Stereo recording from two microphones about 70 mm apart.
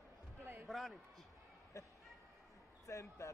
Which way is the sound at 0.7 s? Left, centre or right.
Centre.